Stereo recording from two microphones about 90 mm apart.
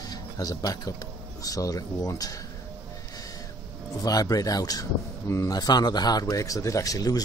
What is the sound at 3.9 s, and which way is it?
Speech, 40° left (ahead or behind).